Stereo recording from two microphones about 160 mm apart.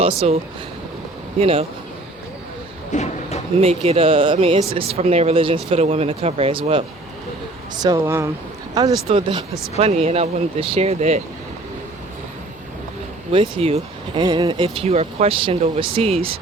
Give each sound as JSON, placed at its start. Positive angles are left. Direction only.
{"t": 0.0, "sound": "speech", "side_deg": -40}
{"t": 1.4, "sound": "speech", "side_deg": -35}
{"t": 2.9, "sound": "a sound", "side_deg": 45}
{"t": 3.6, "sound": "speech", "side_deg": -35}
{"t": 7.8, "sound": "speech", "side_deg": -20}
{"t": 9.0, "sound": "speech", "side_deg": -35}
{"t": 13.3, "sound": "speech", "side_deg": -40}
{"t": 14.2, "sound": "speech", "side_deg": -25}